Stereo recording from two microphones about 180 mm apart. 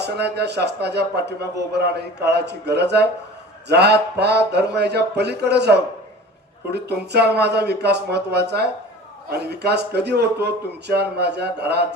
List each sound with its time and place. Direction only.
0.0 s speech: 65° right (ahead or behind)